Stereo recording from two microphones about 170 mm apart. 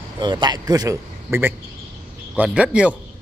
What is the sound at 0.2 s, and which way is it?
A man's voice, 25° right (ahead or behind).